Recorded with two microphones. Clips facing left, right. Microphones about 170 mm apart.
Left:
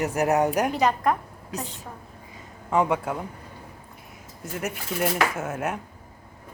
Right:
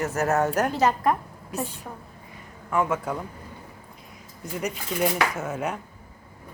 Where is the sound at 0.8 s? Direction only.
5° right (ahead or behind).